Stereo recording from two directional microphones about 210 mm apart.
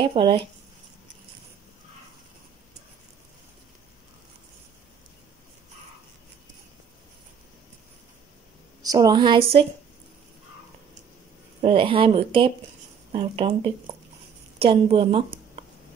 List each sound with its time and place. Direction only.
0.0 s speech: 25° right (ahead or behind)
8.8 s speech: 20° right (ahead or behind)
11.6 s speech: 25° right (ahead or behind)